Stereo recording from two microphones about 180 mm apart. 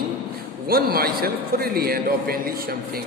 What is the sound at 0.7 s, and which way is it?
A man's voice, 55° right (ahead or behind).